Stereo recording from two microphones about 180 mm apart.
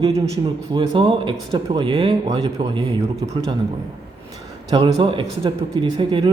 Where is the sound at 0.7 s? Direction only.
25° right (ahead or behind).